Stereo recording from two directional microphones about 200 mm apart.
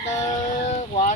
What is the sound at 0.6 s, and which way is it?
Speech, 35° left (ahead or behind).